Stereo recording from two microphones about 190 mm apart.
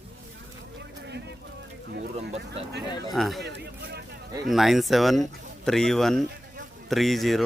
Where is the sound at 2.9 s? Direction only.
20° left (ahead or behind).